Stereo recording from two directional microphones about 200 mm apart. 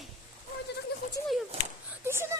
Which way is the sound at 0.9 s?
55° left (ahead or behind).